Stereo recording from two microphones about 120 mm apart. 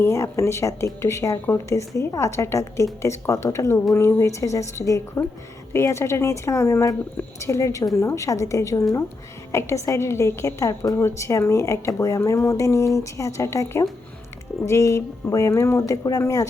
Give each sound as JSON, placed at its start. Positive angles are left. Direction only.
{"t": 0.0, "sound": "a woman's voice", "side_deg": 25}